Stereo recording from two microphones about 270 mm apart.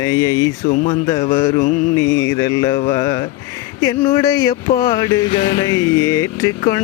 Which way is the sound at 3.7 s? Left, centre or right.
Centre.